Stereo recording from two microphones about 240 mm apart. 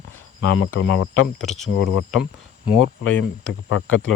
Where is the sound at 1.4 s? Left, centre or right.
Centre.